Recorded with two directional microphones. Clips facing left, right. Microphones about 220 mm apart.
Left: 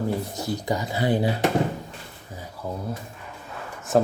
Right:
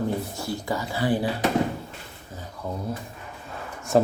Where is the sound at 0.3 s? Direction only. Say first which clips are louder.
Left 2 dB; 20° left (ahead or behind).